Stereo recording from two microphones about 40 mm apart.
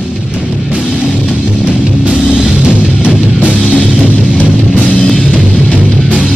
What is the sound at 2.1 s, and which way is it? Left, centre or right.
Music, right.